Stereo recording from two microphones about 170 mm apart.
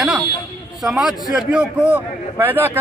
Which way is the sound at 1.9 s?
10° right (ahead or behind).